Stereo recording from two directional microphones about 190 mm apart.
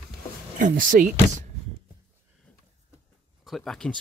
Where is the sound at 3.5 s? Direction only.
Centre (ahead or behind).